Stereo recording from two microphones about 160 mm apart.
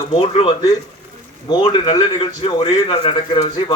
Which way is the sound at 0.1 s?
35° left (ahead or behind).